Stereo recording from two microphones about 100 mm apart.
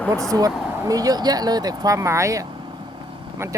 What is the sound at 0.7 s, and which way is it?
Speech, 35° right (ahead or behind).